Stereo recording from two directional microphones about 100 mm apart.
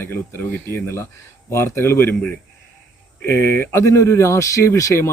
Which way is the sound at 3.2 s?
25° left (ahead or behind).